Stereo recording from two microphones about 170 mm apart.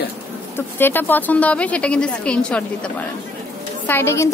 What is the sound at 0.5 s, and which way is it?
A woman's voice, 10° left (ahead or behind).